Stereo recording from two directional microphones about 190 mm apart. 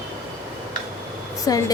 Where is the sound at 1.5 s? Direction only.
20° left (ahead or behind).